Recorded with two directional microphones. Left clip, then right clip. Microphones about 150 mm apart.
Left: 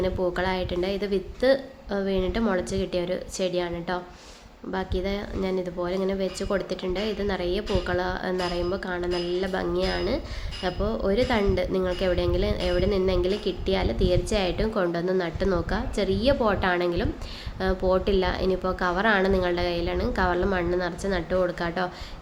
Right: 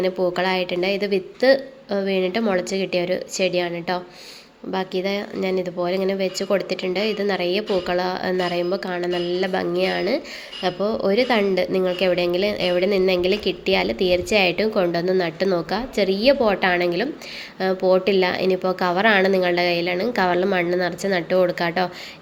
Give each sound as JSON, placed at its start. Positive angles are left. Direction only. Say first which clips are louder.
{"t": 0.0, "sound": "a woman's voice", "louder": "right 5 dB", "side_deg": -15}